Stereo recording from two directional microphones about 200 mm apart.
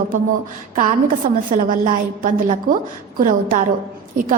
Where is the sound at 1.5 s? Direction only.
40° right (ahead or behind).